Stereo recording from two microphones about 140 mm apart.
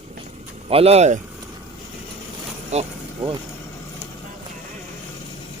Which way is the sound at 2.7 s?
50° right (ahead or behind).